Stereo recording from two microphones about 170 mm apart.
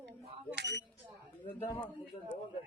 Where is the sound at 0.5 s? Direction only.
90° right.